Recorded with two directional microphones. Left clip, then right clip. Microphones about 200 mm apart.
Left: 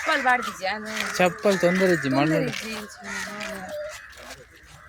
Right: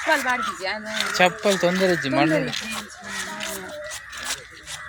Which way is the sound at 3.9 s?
55° right (ahead or behind).